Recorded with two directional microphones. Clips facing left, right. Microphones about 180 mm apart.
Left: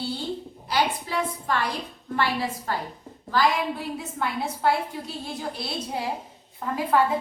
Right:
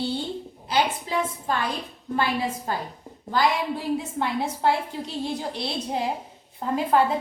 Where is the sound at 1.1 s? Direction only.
20° right (ahead or behind).